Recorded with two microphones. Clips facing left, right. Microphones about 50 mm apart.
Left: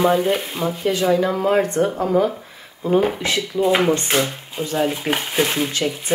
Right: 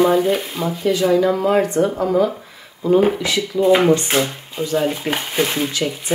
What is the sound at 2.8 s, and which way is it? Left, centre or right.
Speech, left.